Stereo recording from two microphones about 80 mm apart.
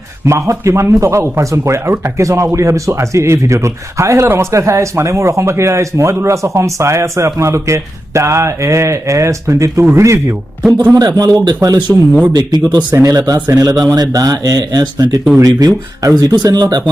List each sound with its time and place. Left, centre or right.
0.3 s speech: right
10.9 s speech: right
13.1 s speech: right